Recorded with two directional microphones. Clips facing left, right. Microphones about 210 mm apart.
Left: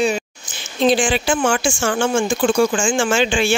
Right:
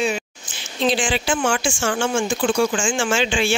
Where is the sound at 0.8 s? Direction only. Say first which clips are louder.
Left 4 dB; 45° left (ahead or behind).